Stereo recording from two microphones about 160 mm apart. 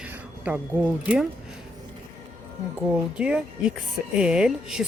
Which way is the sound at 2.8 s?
5° right (ahead or behind).